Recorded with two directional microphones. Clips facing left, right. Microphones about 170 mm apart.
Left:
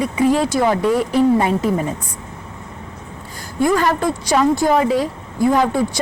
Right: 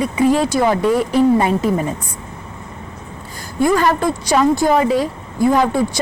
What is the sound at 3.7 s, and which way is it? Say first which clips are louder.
A woman's voice: right 1 dB; 15° right (ahead or behind).